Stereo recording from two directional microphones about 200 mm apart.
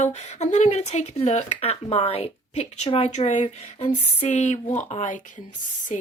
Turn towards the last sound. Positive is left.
turn(degrees=40)  # may be behind; listen again after turning